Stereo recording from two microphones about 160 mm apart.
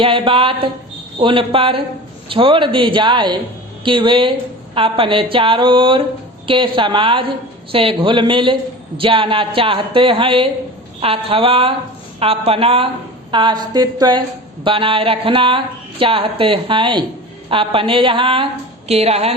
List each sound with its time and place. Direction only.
0.0 s a woman's voice: 35° right (ahead or behind)